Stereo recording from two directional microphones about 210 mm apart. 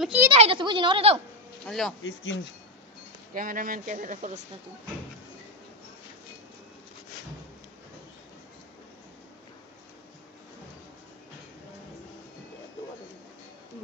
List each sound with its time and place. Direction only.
0.0 s speech: 5° right (ahead or behind)
0.3 s a woman's voice: 25° right (ahead or behind)
1.7 s speech: centre (ahead or behind)
2.0 s speech: 60° left (ahead or behind)
3.3 s speech: 40° right (ahead or behind)